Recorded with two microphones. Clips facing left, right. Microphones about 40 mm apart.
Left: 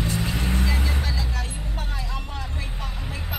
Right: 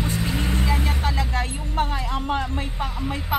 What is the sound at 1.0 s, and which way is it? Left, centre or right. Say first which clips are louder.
Speech: right 6 dB; right.